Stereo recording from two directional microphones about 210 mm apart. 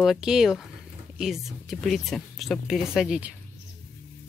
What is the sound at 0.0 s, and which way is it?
A woman's voice, centre (ahead or behind).